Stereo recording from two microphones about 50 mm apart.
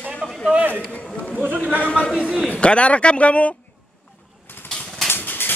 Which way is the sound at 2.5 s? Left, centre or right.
Left.